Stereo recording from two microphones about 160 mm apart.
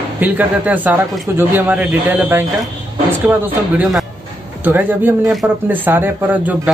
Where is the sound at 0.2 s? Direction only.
10° right (ahead or behind).